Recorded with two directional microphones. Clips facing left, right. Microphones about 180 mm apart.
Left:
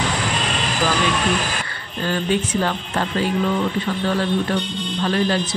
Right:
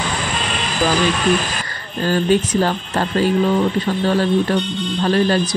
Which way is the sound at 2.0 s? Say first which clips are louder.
Right 5 dB; 40° right (ahead or behind).